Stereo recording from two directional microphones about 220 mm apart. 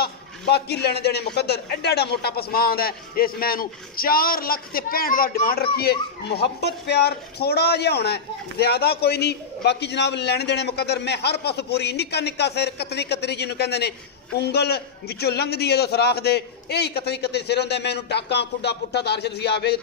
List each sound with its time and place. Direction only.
0.0 s a man's voice: 45° left (ahead or behind)